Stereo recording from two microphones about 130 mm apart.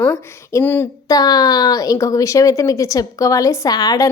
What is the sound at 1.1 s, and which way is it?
A woman's voice, 30° left (ahead or behind).